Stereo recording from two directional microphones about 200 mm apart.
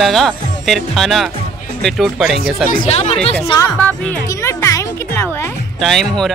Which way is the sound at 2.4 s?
45° left (ahead or behind).